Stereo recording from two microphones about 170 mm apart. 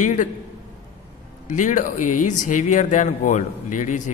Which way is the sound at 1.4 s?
45° left (ahead or behind).